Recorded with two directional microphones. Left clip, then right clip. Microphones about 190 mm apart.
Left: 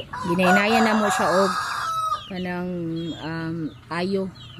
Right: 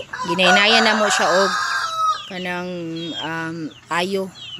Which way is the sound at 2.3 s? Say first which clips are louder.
Right 4 dB; 15° right (ahead or behind).